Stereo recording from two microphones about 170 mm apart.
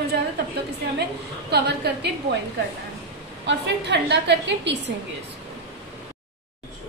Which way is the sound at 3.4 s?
85° right.